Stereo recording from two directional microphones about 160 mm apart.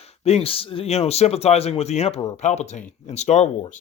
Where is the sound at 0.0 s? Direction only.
40° left (ahead or behind).